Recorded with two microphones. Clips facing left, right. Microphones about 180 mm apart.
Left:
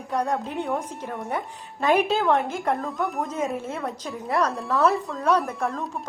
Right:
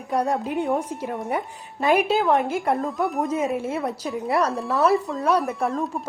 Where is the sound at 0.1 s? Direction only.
10° right (ahead or behind).